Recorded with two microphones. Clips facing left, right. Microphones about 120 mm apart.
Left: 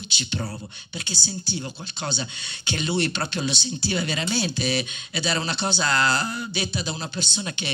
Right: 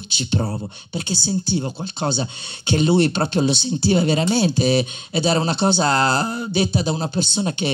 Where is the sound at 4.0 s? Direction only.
35° right (ahead or behind).